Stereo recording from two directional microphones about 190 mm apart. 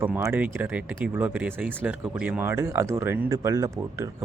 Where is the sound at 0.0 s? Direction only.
10° right (ahead or behind).